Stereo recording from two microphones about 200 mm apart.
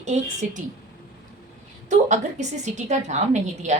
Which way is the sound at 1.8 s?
35° right (ahead or behind).